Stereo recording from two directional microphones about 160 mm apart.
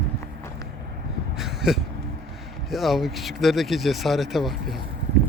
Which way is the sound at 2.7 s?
Centre (ahead or behind).